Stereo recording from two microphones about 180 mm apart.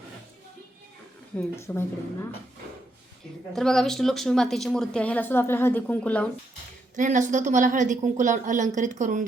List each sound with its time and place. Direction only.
1.3 s speech: 10° left (ahead or behind)
3.5 s speech: centre (ahead or behind)
6.9 s a woman's voice: 45° right (ahead or behind)